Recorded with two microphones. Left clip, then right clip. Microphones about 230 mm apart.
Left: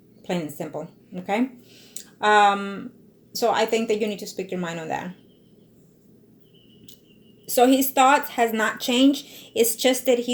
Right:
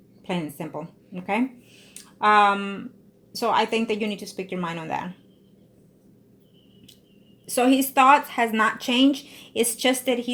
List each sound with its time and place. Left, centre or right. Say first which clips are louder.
0.3 s a woman's voice: left 2 dB; right
7.4 s a woman's voice: left 3 dB; right